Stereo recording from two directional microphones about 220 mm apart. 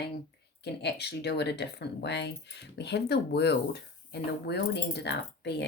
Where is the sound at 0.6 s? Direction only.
50° left (ahead or behind).